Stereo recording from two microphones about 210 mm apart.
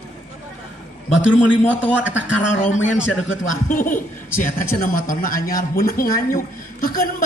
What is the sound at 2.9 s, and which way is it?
Speech, 65° left (ahead or behind).